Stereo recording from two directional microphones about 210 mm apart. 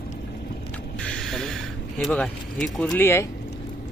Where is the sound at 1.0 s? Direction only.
5° left (ahead or behind).